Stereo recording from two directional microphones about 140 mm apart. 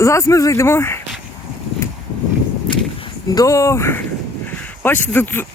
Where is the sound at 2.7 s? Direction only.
30° left (ahead or behind).